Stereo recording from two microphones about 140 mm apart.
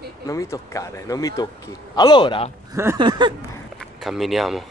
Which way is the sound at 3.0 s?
35° right (ahead or behind).